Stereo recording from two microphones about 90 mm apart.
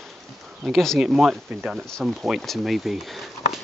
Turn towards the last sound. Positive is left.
turn(degrees=0)  # may be behind; listen again after turning